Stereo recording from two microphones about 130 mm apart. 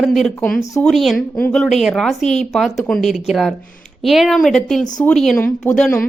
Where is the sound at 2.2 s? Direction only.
60° left (ahead or behind).